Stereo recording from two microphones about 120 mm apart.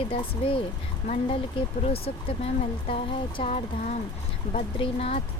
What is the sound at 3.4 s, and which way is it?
Speech, 65° left (ahead or behind).